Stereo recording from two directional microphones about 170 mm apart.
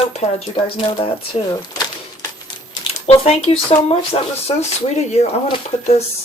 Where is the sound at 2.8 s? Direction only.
40° left (ahead or behind).